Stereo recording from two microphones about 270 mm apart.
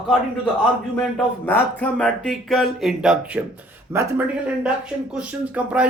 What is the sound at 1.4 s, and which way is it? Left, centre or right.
Speech, centre.